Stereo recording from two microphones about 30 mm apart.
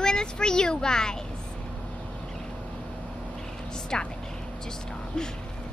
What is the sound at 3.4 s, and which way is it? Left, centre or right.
Vehicle, centre.